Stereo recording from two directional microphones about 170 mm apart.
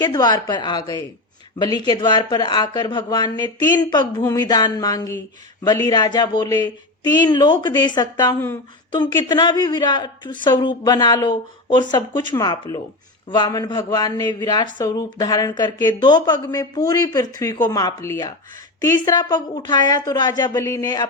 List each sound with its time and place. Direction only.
0.0 s speech: 25° left (ahead or behind)